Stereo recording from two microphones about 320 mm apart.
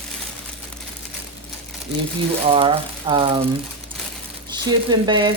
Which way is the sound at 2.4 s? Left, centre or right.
Centre.